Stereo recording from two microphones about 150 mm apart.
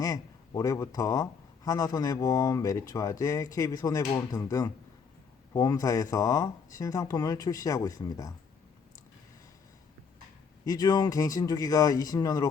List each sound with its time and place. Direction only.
0.0 s speech: 25° left (ahead or behind)
10.7 s speech: 25° left (ahead or behind)